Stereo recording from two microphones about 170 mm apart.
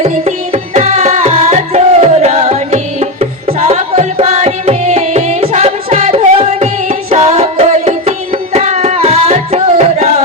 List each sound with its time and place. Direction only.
0.0 s music: 40° right (ahead or behind)